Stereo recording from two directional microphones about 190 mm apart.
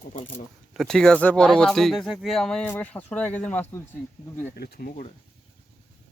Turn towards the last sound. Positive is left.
turn(degrees=55)  # may be behind; listen again after turning